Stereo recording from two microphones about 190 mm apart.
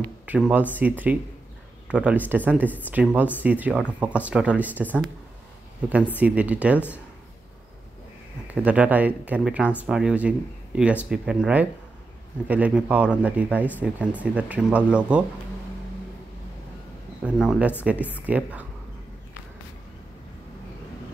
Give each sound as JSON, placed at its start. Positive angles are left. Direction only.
{"t": 0.3, "sound": "speech", "side_deg": -5}
{"t": 6.1, "sound": "speech", "side_deg": -10}
{"t": 8.5, "sound": "speech", "side_deg": -5}
{"t": 17.2, "sound": "speech", "side_deg": -5}